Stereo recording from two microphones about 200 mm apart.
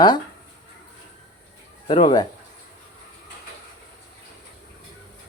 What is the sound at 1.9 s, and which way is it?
Speech, 25° left (ahead or behind).